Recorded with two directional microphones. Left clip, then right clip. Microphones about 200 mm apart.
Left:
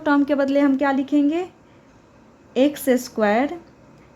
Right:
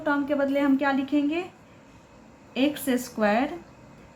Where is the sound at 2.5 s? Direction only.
40° left (ahead or behind).